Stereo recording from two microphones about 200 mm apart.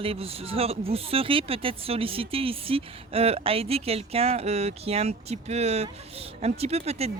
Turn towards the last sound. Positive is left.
turn(degrees=-30)  # may be behind; listen again after turning